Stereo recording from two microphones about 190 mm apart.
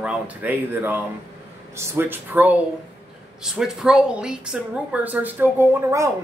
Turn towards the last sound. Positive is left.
turn(degrees=-15)  # may be behind; listen again after turning